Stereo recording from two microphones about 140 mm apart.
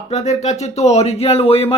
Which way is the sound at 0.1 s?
55° left (ahead or behind).